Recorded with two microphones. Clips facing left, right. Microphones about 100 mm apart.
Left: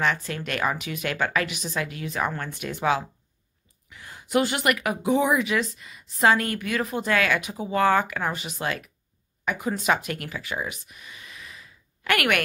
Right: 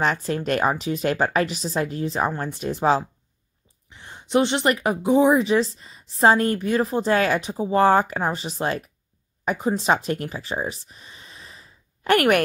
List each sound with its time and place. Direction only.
0.0 s a woman's voice: 40° right (ahead or behind)